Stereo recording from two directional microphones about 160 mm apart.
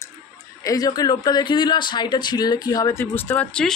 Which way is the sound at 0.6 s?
25° left (ahead or behind).